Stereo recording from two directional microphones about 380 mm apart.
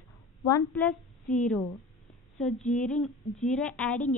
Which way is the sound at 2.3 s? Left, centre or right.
Centre.